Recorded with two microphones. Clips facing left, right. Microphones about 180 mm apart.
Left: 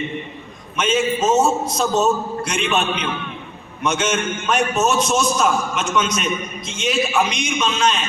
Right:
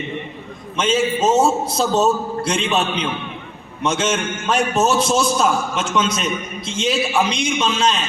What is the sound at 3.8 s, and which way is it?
A man's voice, 30° right (ahead or behind).